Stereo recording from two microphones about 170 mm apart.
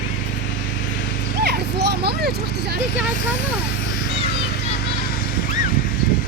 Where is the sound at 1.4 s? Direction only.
75° right (ahead or behind).